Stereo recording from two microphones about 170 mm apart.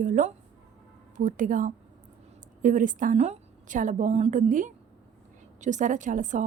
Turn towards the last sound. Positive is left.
turn(degrees=-50)  # may be behind; listen again after turning